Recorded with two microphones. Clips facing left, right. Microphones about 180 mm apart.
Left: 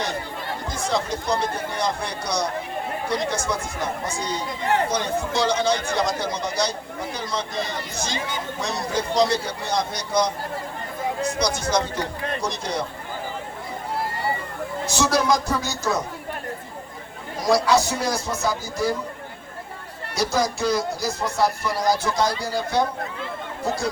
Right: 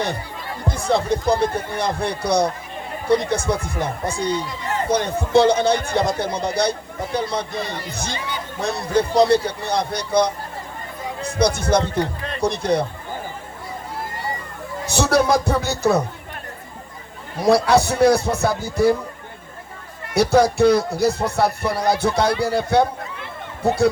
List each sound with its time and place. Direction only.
0.7 s music: 60° right (ahead or behind)
1.4 s a man's voice: 55° right (ahead or behind)
4.4 s speech: 60° left (ahead or behind)
4.9 s a man's voice: 55° right (ahead or behind)
14.8 s a man's voice: 60° right (ahead or behind)
17.3 s a man's voice: 60° right (ahead or behind)
20.1 s a man's voice: 60° right (ahead or behind)